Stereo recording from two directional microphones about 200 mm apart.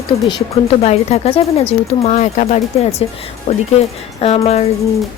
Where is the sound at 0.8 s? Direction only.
30° left (ahead or behind).